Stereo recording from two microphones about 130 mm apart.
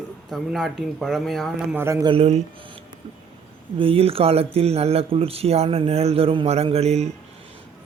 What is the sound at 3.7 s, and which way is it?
Speech, 45° right (ahead or behind).